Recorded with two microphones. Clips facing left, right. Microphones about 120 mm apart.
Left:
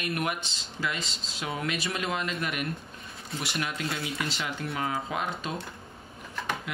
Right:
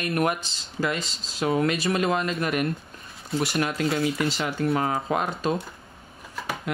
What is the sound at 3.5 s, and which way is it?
Speech, 45° right (ahead or behind).